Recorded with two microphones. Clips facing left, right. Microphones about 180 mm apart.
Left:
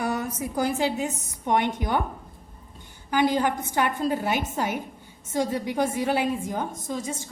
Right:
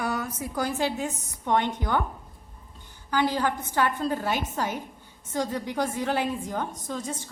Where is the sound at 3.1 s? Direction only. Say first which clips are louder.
Left 3 dB; 15° left (ahead or behind).